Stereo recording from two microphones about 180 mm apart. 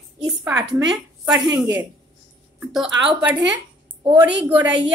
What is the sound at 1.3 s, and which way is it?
Speech, centre (ahead or behind).